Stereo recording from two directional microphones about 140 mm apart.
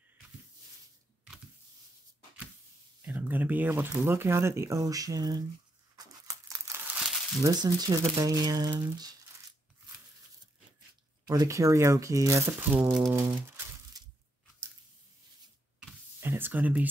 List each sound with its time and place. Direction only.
3.0 s speech: 10° right (ahead or behind)
5.9 s crumpling: 25° right (ahead or behind)
7.4 s speech: 25° right (ahead or behind)
11.2 s speech: 25° right (ahead or behind)
13.1 s crumpling: 20° right (ahead or behind)
15.8 s a sound: 15° right (ahead or behind)